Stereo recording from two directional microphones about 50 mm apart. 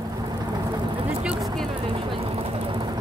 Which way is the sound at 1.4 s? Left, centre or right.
Centre.